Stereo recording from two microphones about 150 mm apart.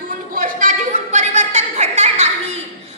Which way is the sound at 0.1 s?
65° right (ahead or behind).